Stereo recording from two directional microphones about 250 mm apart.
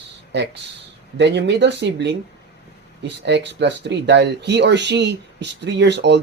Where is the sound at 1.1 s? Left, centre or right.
Right.